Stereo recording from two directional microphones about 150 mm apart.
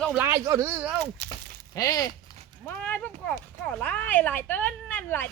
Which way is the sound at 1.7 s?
25° left (ahead or behind).